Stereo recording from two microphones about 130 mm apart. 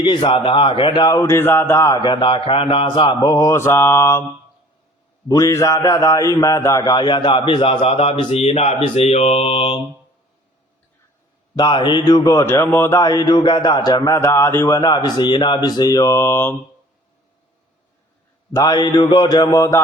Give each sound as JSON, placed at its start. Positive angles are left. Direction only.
{"t": 0.0, "sound": "a man's voice", "side_deg": 35}
{"t": 3.2, "sound": "speech", "side_deg": 25}
{"t": 5.3, "sound": "a man's voice", "side_deg": 25}
{"t": 11.5, "sound": "speech", "side_deg": 35}
{"t": 13.0, "sound": "a man's voice", "side_deg": 30}
{"t": 18.5, "sound": "a man's voice", "side_deg": 30}